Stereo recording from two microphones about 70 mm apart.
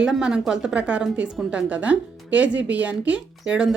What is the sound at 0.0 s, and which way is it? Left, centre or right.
Speech, centre.